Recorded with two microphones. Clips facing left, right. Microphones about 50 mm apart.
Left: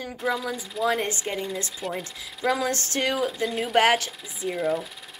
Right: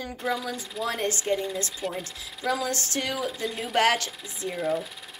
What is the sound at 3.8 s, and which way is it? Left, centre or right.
Speech, centre.